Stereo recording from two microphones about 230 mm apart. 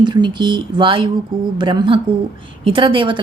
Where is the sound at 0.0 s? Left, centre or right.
Centre.